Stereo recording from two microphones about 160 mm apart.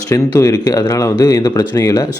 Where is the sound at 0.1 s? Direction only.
20° left (ahead or behind).